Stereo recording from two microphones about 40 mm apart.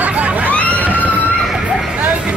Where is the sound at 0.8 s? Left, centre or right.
Right.